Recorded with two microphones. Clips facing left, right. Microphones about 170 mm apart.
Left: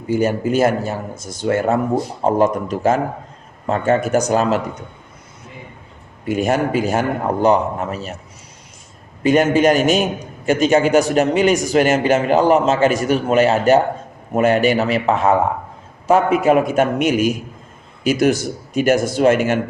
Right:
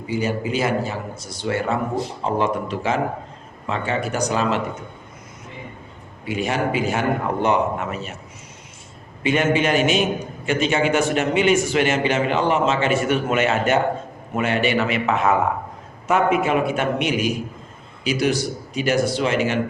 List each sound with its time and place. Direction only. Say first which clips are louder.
0.1 s a man's voice: left 6 dB; 45° left (ahead or behind)
6.2 s a man's voice: left 5 dB; 45° left (ahead or behind)
9.2 s a man's voice: left 6 dB; 40° left (ahead or behind)